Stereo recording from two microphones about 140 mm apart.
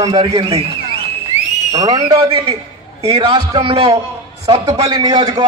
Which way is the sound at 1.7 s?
30° right (ahead or behind).